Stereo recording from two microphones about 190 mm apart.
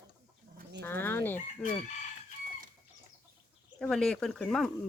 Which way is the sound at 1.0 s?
10° left (ahead or behind).